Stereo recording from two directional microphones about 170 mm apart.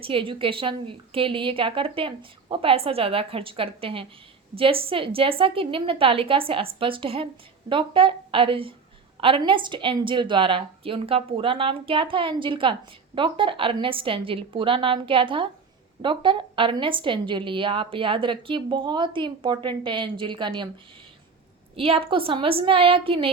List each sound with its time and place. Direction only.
0.0 s a woman's voice: 30° right (ahead or behind)
21.8 s a woman's voice: 35° right (ahead or behind)